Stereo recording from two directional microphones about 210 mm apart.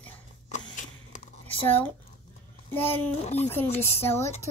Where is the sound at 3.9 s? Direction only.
10° left (ahead or behind).